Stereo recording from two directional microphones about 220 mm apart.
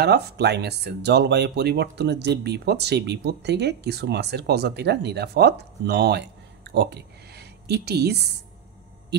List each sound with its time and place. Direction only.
0.0 s speech: 45° right (ahead or behind)